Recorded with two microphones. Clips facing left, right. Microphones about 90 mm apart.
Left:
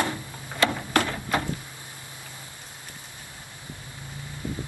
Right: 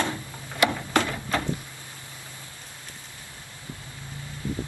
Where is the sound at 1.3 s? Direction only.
15° left (ahead or behind).